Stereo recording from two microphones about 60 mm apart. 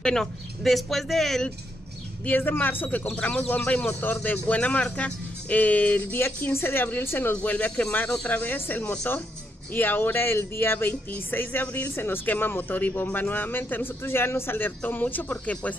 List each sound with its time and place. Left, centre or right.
0.0 s speech: centre
2.2 s speech: left
3.2 s speech: left
6.2 s speech: left
7.4 s speech: left
11.9 s speech: left